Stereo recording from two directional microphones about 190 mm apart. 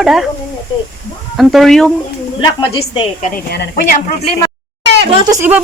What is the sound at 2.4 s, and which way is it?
Speech, 25° left (ahead or behind).